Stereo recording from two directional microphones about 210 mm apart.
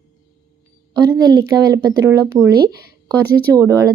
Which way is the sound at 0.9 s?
15° right (ahead or behind).